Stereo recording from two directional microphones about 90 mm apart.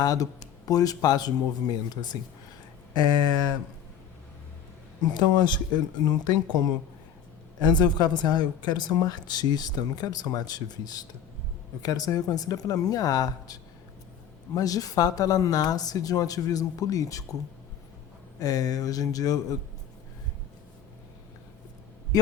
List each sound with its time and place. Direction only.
0.0 s a woman's voice: 45° left (ahead or behind)
5.1 s a woman's voice: 50° left (ahead or behind)
18.3 s a woman's voice: 45° left (ahead or behind)
22.1 s speech: 45° left (ahead or behind)